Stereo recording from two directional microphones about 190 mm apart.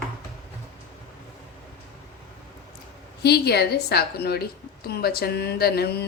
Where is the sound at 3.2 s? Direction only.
60° left (ahead or behind).